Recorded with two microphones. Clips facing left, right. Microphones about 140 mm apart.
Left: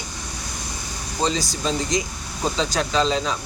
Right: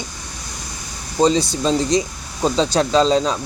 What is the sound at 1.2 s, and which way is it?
Speech, 20° right (ahead or behind).